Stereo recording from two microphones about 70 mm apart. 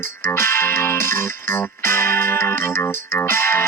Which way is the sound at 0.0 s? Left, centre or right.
Left.